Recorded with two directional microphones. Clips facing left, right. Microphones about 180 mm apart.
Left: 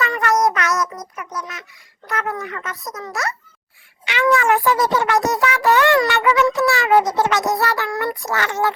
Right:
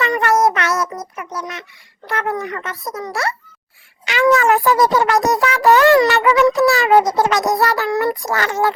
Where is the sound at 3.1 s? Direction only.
30° right (ahead or behind).